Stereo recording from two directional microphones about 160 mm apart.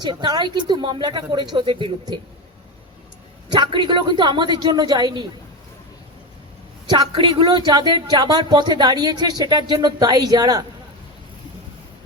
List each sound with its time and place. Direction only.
0.0 s speech: 25° right (ahead or behind)
3.5 s speech: 30° right (ahead or behind)
6.9 s speech: 30° right (ahead or behind)